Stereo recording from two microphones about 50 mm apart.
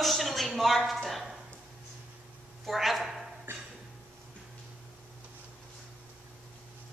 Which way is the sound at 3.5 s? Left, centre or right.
Right.